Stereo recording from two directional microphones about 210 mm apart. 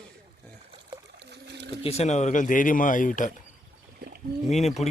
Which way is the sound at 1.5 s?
55° right (ahead or behind).